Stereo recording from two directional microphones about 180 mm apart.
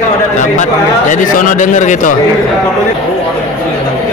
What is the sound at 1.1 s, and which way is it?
A man's voice, 45° left (ahead or behind).